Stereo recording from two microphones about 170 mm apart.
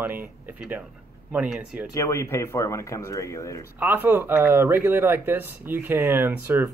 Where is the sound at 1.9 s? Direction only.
15° left (ahead or behind).